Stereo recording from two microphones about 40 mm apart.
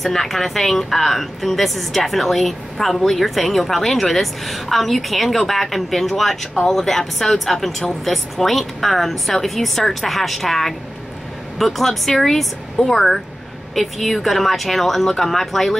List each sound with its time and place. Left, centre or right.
0.0 s a woman's voice: centre